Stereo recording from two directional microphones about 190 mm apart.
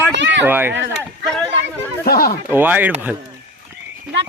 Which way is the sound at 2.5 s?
10° right (ahead or behind).